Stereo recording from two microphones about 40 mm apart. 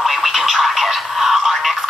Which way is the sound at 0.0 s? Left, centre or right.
Centre.